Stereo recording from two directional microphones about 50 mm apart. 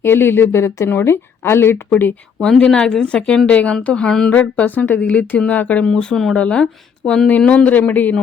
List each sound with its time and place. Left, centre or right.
0.0 s a woman's voice: left
1.7 s speech: left
2.6 s speech: centre
5.8 s speech: centre; by 8.1 s left